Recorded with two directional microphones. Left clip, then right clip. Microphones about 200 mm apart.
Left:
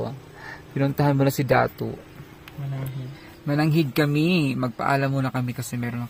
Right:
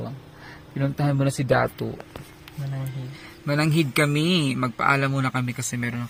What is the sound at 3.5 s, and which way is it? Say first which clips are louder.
Speech: even; centre (ahead or behind).